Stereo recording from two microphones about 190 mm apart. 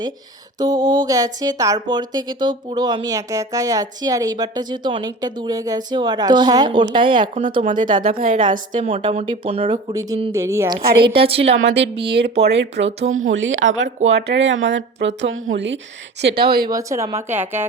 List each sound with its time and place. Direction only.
0.6 s speech: 20° right (ahead or behind)
8.0 s a woman's voice: 45° right (ahead or behind)
10.3 s speech: 15° right (ahead or behind)
10.8 s a woman's voice: 30° right (ahead or behind)
11.5 s speech: 70° right (ahead or behind)
13.1 s speech: 90° right; by 15.8 s 70° right (ahead or behind)
16.3 s speech: 25° right (ahead or behind); by 17.7 s 10° right (ahead or behind)